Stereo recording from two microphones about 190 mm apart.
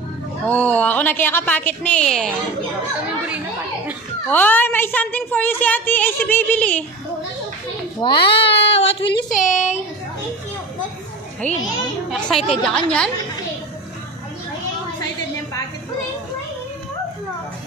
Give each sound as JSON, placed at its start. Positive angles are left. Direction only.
{"t": 0.5, "sound": "a woman's voice", "side_deg": 5}
{"t": 4.3, "sound": "a woman's voice", "side_deg": 10}
{"t": 8.0, "sound": "speech", "side_deg": 25}
{"t": 9.3, "sound": "speech", "side_deg": 40}
{"t": 11.4, "sound": "a woman's voice", "side_deg": 5}